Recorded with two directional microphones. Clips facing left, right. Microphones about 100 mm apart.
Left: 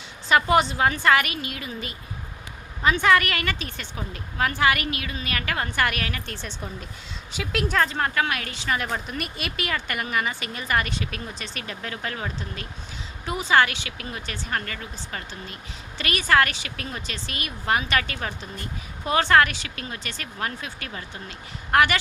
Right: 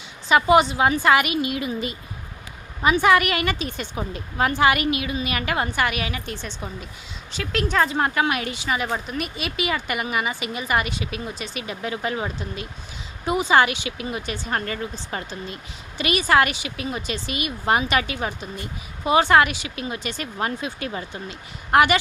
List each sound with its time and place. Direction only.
0.3 s speech: 5° right (ahead or behind)
5.7 s a woman's voice: 5° right (ahead or behind)
7.8 s speech: 15° right (ahead or behind)